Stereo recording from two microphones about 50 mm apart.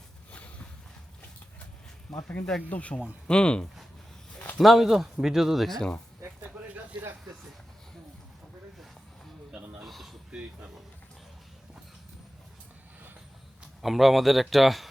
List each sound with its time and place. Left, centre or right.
0.3 s a sound: left
2.1 s speech: centre
2.6 s speech: left
3.2 s speech: centre
4.4 s a sound: left
4.6 s speech: centre
5.6 s speech: centre
9.8 s a sound: centre
13.8 s speech: centre